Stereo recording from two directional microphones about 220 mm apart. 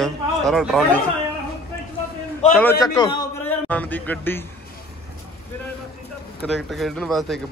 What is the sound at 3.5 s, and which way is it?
Speech, 10° left (ahead or behind).